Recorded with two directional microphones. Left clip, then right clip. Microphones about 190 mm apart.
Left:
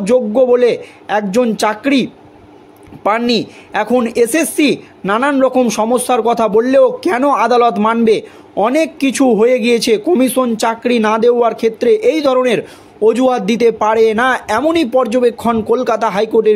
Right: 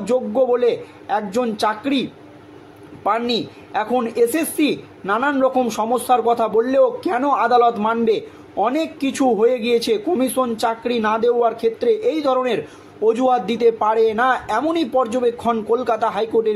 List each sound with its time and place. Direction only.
0.0 s speech: 45° left (ahead or behind)